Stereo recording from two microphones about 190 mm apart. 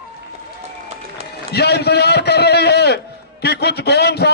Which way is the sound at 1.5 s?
60° left (ahead or behind).